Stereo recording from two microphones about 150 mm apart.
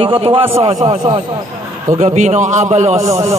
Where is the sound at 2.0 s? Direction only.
50° right (ahead or behind).